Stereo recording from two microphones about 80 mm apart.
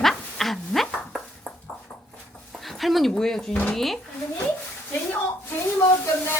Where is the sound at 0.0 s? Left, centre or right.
Centre.